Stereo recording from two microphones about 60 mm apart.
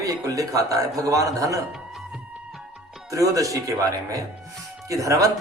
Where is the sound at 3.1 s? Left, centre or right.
Right.